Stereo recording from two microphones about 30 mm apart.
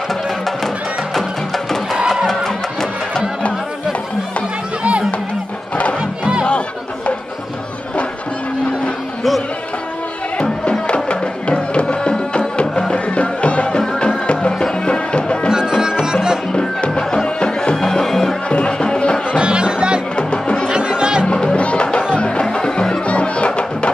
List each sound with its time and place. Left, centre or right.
2.2 s music: centre
10.9 s music: left
15.8 s music: right
16.5 s music: left; by 18.3 s centre
18.5 s music: left
19.3 s music: right
20.2 s music: left
20.6 s music: right
21.3 s music: left
23.0 s music: left